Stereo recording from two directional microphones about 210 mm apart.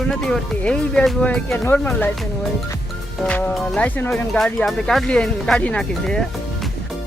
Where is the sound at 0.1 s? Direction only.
Centre (ahead or behind).